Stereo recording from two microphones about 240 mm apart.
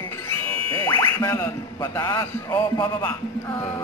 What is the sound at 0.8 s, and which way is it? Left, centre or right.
A man's voice, centre.